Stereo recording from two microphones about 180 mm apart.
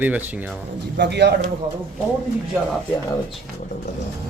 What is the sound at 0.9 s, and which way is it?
Speech, 70° right (ahead or behind).